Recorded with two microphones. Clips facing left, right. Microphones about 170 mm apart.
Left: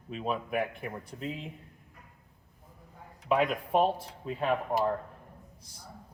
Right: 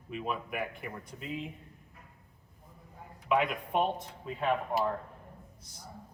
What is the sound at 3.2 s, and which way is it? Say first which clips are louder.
Speech: left 2 dB; 35° left (ahead or behind).